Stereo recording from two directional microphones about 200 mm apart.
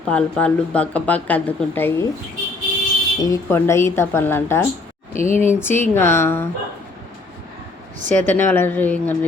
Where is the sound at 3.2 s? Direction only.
15° left (ahead or behind).